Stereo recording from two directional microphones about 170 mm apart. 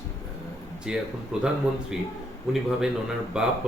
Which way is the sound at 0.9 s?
5° right (ahead or behind).